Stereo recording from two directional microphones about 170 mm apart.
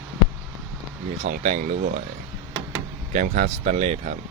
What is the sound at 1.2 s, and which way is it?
Speech, 45° right (ahead or behind).